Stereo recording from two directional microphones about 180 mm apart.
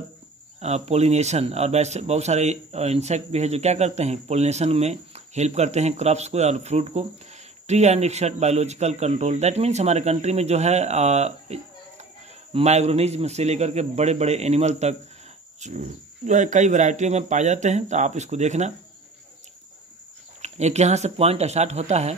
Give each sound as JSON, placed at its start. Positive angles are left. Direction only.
{"t": 0.6, "sound": "speech", "side_deg": -35}
{"t": 20.4, "sound": "speech", "side_deg": -40}